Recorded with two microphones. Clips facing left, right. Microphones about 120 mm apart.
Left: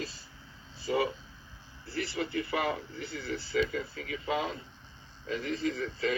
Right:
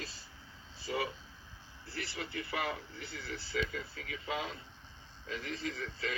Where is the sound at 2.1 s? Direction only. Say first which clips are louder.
Left 6 dB; 60° left (ahead or behind).